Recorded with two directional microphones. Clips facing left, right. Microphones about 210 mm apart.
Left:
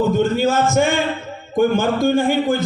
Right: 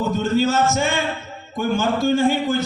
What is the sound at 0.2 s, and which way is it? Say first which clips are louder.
A man's voice: left 2 dB; 55° left (ahead or behind).